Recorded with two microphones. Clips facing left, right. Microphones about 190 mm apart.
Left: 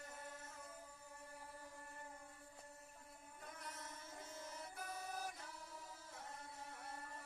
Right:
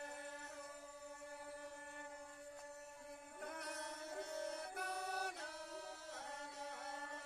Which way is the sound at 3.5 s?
70° right (ahead or behind).